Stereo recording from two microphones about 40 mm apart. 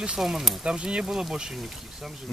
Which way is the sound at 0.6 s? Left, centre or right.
Right.